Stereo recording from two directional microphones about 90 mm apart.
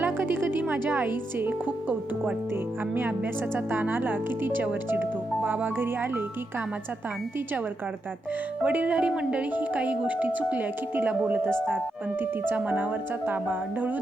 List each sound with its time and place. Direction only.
0.0 s speech: 25° right (ahead or behind)
8.6 s speech: 15° right (ahead or behind)